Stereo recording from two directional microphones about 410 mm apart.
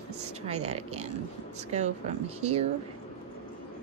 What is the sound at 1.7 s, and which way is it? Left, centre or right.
Speech, centre.